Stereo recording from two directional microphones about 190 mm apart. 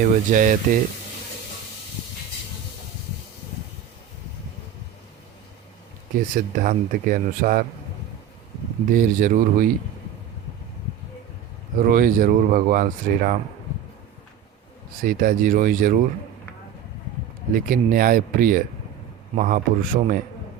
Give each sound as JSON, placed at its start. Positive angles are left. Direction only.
{"t": 0.0, "sound": "speech", "side_deg": -45}
{"t": 6.1, "sound": "speech", "side_deg": -45}
{"t": 8.9, "sound": "speech", "side_deg": -45}
{"t": 11.8, "sound": "speech", "side_deg": -50}
{"t": 15.0, "sound": "speech", "side_deg": -45}
{"t": 17.5, "sound": "speech", "side_deg": -45}